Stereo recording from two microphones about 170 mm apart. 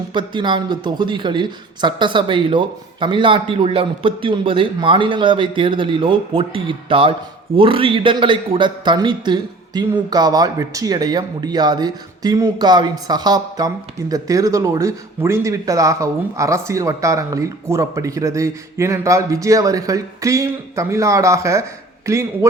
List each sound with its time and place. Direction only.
0.1 s speech: 25° right (ahead or behind)